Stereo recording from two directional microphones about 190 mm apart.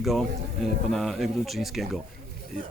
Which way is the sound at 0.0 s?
Centre (ahead or behind).